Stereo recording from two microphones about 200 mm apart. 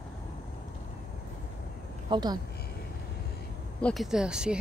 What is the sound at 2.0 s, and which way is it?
Speech, 20° right (ahead or behind).